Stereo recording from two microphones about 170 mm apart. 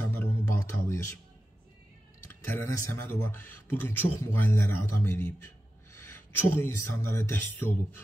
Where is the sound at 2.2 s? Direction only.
15° left (ahead or behind).